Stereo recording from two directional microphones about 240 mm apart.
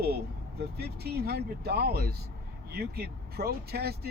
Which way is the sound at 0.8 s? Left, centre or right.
Right.